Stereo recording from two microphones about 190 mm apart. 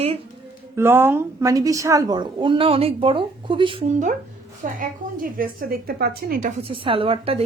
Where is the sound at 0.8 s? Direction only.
10° right (ahead or behind); by 3.9 s 25° right (ahead or behind).